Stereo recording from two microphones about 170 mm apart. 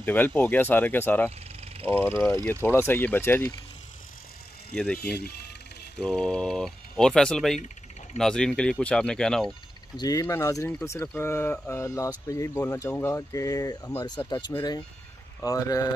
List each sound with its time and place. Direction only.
0.0 s speech: 10° left (ahead or behind)
1.6 s vehicle: 35° right (ahead or behind)
2.0 s speech: 15° left (ahead or behind)
4.7 s speech: 5° left (ahead or behind)
5.0 s speech: 75° left (ahead or behind)
5.9 s speech: 5° left (ahead or behind)
9.9 s speech: 20° left (ahead or behind)